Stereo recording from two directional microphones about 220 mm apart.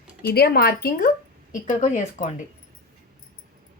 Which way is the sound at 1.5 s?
35° left (ahead or behind).